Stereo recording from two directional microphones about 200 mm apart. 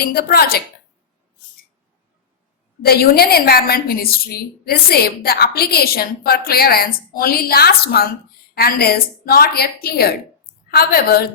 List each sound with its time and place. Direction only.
0.0 s a woman's voice: 50° left (ahead or behind)
2.8 s a woman's voice: 50° left (ahead or behind)